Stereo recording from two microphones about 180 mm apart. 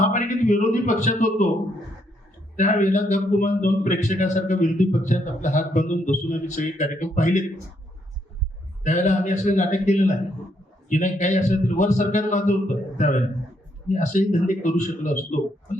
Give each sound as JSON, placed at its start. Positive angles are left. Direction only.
{"t": 0.0, "sound": "a man's voice", "side_deg": 45}
{"t": 2.6, "sound": "a man's voice", "side_deg": 45}
{"t": 8.8, "sound": "a man's voice", "side_deg": 40}